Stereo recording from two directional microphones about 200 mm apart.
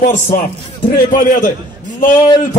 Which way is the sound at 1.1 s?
40° left (ahead or behind).